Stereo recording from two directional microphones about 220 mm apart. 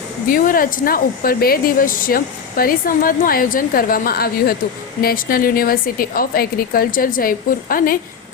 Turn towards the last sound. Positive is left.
turn(degrees=40)  # may be behind; listen again after turning